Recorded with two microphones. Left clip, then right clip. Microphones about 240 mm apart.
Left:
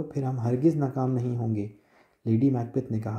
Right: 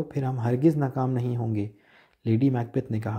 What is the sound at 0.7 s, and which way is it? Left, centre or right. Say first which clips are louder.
Speech: right 1 dB; right.